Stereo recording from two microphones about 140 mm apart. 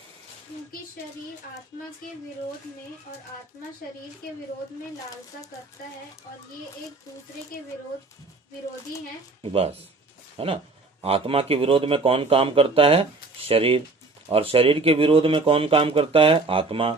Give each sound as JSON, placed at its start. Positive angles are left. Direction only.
{"t": 9.4, "sound": "speech", "side_deg": -45}